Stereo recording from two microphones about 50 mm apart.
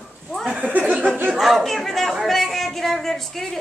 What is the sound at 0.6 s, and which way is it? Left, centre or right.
Speech, right.